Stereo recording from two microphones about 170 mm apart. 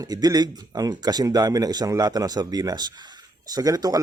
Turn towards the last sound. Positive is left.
turn(degrees=-20)  # may be behind; listen again after turning